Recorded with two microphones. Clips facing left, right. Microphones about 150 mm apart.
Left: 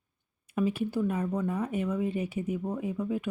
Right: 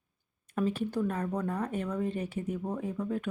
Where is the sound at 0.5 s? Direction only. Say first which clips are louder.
Left 2 dB; 10° left (ahead or behind).